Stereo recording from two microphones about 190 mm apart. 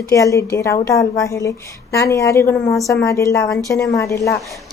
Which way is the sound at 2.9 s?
15° left (ahead or behind).